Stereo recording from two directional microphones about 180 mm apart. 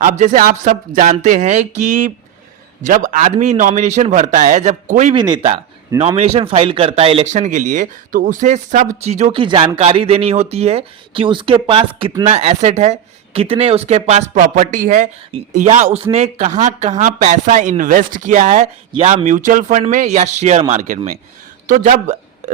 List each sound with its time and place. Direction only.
0.0 s speech: 45° right (ahead or behind)
5.1 s a man's voice: 25° right (ahead or behind); by 22.5 s 40° right (ahead or behind)